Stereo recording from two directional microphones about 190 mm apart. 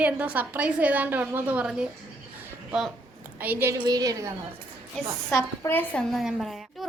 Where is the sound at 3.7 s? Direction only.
20° right (ahead or behind).